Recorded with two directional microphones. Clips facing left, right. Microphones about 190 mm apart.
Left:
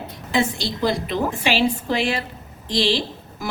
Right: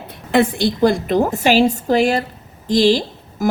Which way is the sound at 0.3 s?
55° right (ahead or behind).